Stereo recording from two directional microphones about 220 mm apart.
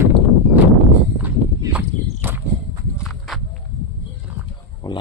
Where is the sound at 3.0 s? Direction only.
Centre (ahead or behind).